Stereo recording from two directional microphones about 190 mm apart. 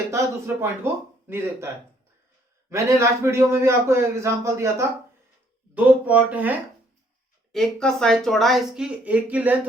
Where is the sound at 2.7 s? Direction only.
15° right (ahead or behind).